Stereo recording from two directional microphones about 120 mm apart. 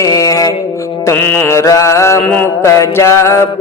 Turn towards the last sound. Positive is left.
turn(degrees=25)  # may be behind; listen again after turning